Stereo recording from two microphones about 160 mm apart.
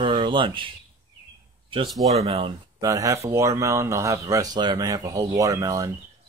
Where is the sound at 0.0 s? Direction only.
30° right (ahead or behind).